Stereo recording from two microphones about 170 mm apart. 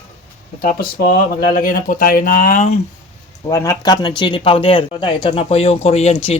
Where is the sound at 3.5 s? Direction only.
15° left (ahead or behind).